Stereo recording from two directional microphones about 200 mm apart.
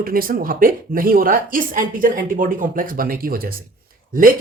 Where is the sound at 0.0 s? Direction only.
45° right (ahead or behind).